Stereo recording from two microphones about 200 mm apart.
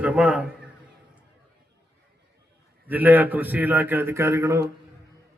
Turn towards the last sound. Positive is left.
turn(degrees=-15)  # may be behind; listen again after turning